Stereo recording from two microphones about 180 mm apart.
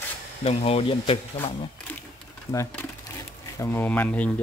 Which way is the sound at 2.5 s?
15° left (ahead or behind).